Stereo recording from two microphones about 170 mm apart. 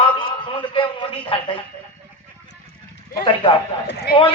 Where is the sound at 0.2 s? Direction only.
30° left (ahead or behind).